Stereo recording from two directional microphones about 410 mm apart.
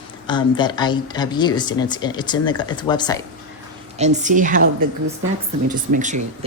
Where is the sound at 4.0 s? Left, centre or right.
Centre.